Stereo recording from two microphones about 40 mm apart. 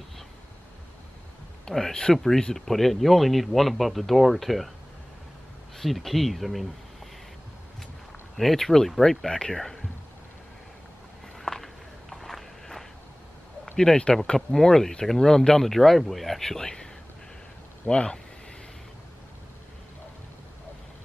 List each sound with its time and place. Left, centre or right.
1.7 s speech: centre
5.8 s speech: centre
8.4 s speech: centre
11.3 s walk: centre
13.9 s speech: centre